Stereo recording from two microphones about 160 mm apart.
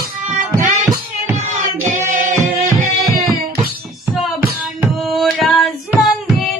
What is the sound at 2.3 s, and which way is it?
Music, 50° right (ahead or behind).